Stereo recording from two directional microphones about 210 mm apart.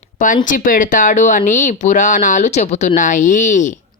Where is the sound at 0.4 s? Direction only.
40° left (ahead or behind).